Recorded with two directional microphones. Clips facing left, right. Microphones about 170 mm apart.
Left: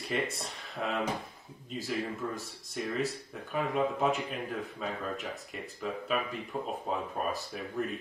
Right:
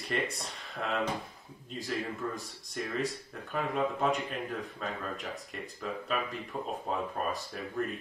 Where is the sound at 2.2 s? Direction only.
10° left (ahead or behind).